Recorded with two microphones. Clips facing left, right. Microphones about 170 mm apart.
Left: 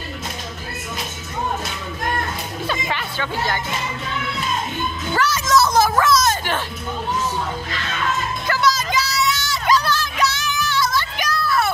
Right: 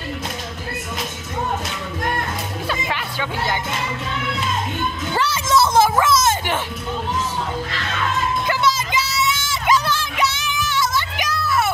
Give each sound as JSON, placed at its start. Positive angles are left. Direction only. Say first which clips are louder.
{"t": 2.7, "sound": "music", "louder": "even", "side_deg": -10}
{"t": 5.1, "sound": "a woman's voice", "louder": "left 1 dB", "side_deg": -25}
{"t": 8.5, "sound": "a sound", "louder": "even", "side_deg": -25}
{"t": 10.8, "sound": "child singing", "louder": "even", "side_deg": -20}